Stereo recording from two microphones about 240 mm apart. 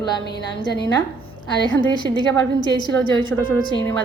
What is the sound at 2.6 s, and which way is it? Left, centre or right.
Speech, centre.